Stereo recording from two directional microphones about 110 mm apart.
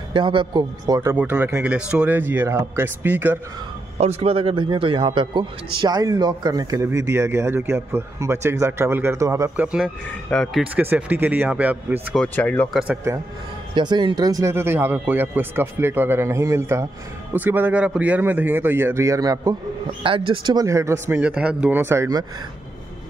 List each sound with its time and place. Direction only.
0.1 s a man's voice: 50° right (ahead or behind); by 1.1 s 35° right (ahead or behind)
1.1 s speech: 15° right (ahead or behind)
4.0 s a man's voice: 75° right (ahead or behind); by 9.5 s 25° right (ahead or behind)
9.6 s speech: 10° right (ahead or behind)
10.3 s speech: 5° left (ahead or behind)
10.6 s speech: 15° right (ahead or behind)
12.4 s speech: 15° left (ahead or behind)
12.7 s speech: 10° right (ahead or behind)
13.7 s a man's voice: 45° right (ahead or behind)
14.5 s speech: 20° right (ahead or behind)
20.0 s speech: 50° right (ahead or behind)
20.5 s speech: 25° right (ahead or behind)
21.2 s speech: 10° right (ahead or behind); by 22.2 s 25° right (ahead or behind)